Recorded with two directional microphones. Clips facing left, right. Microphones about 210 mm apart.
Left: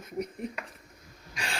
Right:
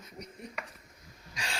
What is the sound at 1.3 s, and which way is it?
Wheeze, 60° left (ahead or behind).